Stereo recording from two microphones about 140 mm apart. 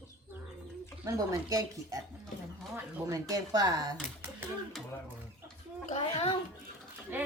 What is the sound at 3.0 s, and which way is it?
Speech, 25° right (ahead or behind).